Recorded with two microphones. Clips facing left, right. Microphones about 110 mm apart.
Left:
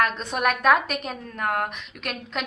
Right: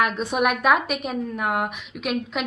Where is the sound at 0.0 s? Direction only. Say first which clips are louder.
Right 2 dB; 10° right (ahead or behind).